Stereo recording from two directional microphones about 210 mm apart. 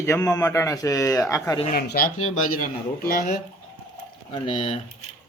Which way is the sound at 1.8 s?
45° left (ahead or behind).